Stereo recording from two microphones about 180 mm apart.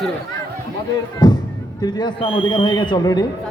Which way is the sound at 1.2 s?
25° left (ahead or behind).